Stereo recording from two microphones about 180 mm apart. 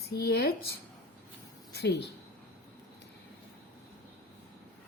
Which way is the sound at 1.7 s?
70° left (ahead or behind).